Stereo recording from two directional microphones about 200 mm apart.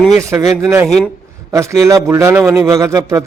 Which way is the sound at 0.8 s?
Centre (ahead or behind).